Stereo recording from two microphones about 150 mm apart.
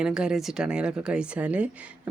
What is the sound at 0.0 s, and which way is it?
A woman's voice, 5° right (ahead or behind).